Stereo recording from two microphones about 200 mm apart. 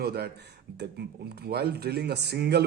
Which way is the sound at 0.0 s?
55° right (ahead or behind).